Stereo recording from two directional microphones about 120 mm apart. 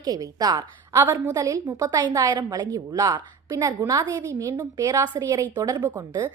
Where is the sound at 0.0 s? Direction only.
30° right (ahead or behind).